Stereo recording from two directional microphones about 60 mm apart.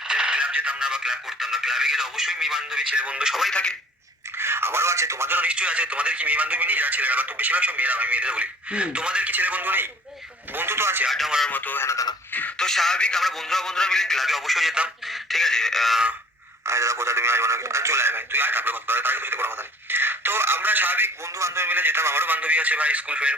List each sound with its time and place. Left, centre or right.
0.0 s speech: centre
3.5 s speech: centre
4.4 s speech: right
5.3 s speech: right
9.3 s speech: right
11.5 s speech: left
12.5 s a man's voice: centre
16.6 s speech: right
21.2 s a man's voice: right
21.7 s speech: right
22.4 s speech: right